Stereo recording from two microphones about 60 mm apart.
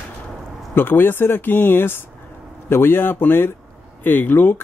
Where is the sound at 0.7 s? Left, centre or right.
Left.